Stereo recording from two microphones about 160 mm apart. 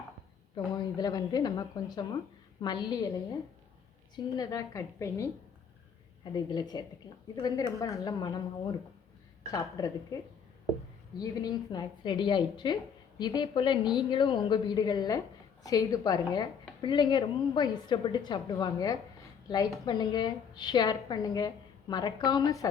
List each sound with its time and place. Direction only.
0.5 s a woman's voice: 25° left (ahead or behind)
6.3 s a woman's voice: 25° left (ahead or behind)
11.2 s a woman's voice: 25° left (ahead or behind)